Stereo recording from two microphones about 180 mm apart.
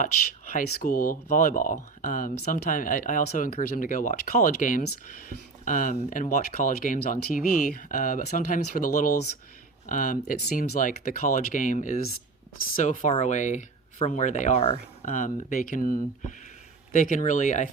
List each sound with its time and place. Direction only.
0.5 s speech: 50° left (ahead or behind)
15.0 s speech: 45° left (ahead or behind)
16.9 s speech: 45° left (ahead or behind)